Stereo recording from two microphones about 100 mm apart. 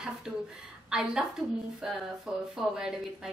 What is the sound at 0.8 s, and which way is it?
A woman's voice, 5° right (ahead or behind).